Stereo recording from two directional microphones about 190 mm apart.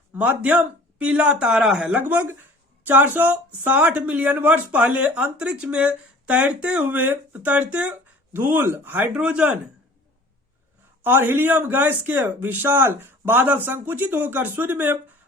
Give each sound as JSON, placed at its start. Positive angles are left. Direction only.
{"t": 0.2, "sound": "speech", "side_deg": -5}
{"t": 11.0, "sound": "speech", "side_deg": -10}